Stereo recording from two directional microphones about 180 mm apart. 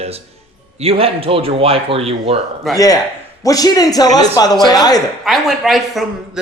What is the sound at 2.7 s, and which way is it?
A man's voice, 20° left (ahead or behind).